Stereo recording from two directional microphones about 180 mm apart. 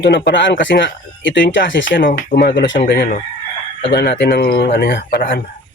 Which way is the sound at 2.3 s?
65° left (ahead or behind).